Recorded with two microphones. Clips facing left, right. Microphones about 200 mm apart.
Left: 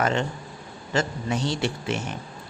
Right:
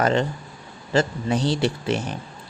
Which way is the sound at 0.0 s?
35° right (ahead or behind).